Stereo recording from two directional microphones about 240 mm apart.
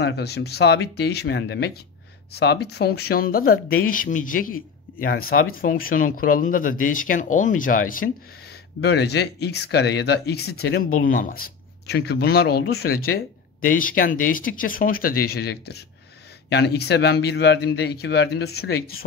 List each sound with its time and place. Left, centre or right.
0.0 s speech: left